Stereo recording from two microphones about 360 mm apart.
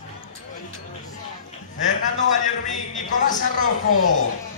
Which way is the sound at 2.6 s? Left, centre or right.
Left.